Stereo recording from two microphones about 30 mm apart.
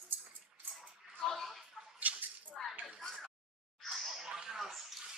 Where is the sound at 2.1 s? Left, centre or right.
Right.